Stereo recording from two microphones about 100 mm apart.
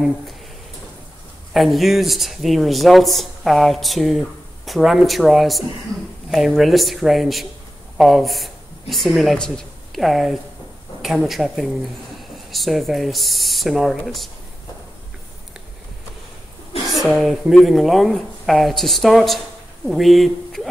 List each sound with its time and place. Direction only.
1.5 s speech: centre (ahead or behind)
16.9 s speech: centre (ahead or behind)